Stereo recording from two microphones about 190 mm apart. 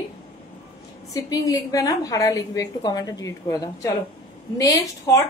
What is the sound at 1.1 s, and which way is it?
A woman's voice, 15° left (ahead or behind).